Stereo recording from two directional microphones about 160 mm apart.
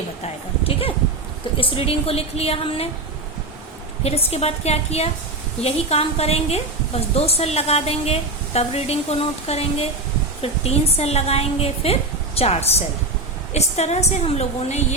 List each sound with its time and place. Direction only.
1.5 s a woman's voice: 35° left (ahead or behind)
4.0 s a woman's voice: 40° left (ahead or behind)